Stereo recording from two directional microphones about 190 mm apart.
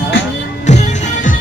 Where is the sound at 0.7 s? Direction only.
35° left (ahead or behind).